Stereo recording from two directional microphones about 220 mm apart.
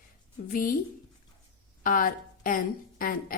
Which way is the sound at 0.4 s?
40° left (ahead or behind).